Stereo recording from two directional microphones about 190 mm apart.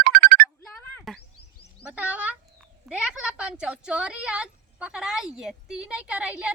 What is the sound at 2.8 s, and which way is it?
A woman's voice, 5° right (ahead or behind).